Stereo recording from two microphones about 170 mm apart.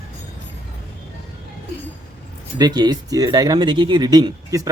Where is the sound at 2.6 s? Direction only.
25° right (ahead or behind).